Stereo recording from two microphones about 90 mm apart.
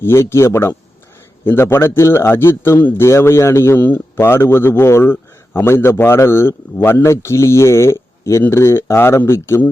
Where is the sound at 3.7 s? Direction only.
20° left (ahead or behind).